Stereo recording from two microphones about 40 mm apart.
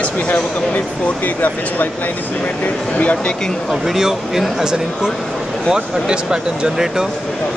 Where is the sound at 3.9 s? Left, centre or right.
Centre.